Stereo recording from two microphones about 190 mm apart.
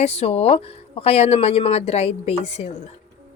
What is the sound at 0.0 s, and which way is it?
Speech, 30° left (ahead or behind).